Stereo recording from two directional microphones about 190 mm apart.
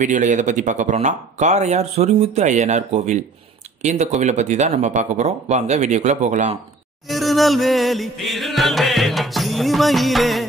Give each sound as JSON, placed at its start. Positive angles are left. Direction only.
{"t": 0.0, "sound": "speech", "side_deg": -40}
{"t": 7.1, "sound": "music", "side_deg": 0}